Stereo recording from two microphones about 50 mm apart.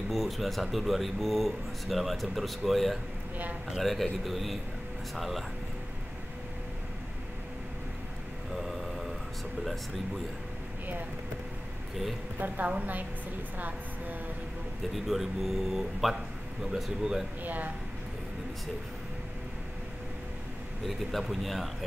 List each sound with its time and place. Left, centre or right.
0.1 s speech: centre
8.5 s a sound: centre
12.4 s a woman's voice: right
13.6 s a sound: right
15.0 s speech: centre
17.4 s a woman's voice: right
20.8 s speech: centre